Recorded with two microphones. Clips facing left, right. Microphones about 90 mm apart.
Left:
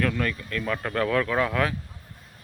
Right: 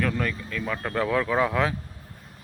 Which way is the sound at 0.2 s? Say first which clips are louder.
Left 1 dB; 15° right (ahead or behind).